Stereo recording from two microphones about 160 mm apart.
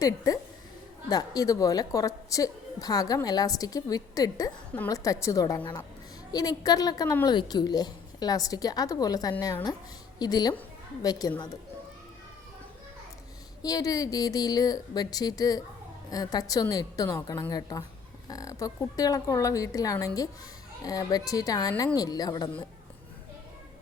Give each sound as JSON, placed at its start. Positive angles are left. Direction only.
{"t": 1.1, "sound": "a woman's voice", "side_deg": 25}
{"t": 13.6, "sound": "a woman's voice", "side_deg": 25}